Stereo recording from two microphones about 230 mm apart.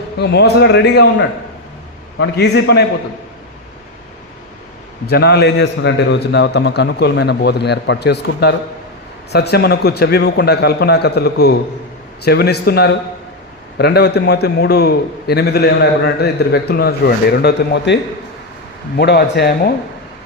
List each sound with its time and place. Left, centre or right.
0.2 s a man's voice: left
5.0 s a man's voice: left